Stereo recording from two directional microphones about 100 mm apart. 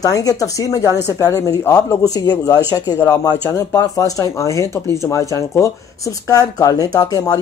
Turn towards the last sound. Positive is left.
turn(degrees=35)  # may be behind; listen again after turning